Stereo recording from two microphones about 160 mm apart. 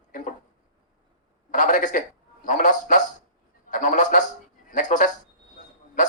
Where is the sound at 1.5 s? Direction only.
55° left (ahead or behind).